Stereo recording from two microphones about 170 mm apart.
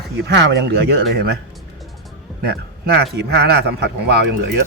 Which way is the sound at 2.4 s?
75° right (ahead or behind).